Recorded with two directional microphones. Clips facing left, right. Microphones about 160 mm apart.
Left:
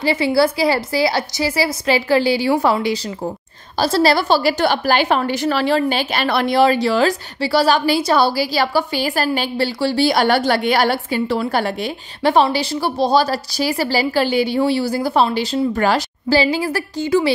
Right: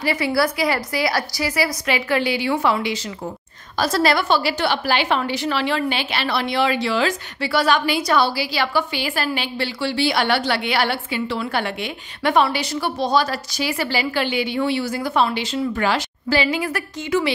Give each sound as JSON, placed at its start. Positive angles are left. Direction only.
{"t": 0.0, "sound": "a woman's voice", "side_deg": 25}